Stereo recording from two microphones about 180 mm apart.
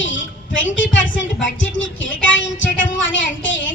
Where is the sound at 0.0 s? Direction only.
90° left.